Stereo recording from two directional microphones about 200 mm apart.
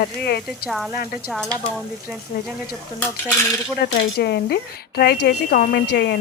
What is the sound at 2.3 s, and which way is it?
Speech, 50° left (ahead or behind).